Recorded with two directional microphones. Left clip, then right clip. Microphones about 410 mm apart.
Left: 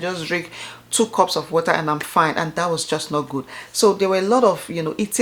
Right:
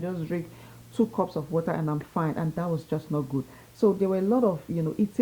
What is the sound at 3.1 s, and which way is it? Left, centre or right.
Speech, centre.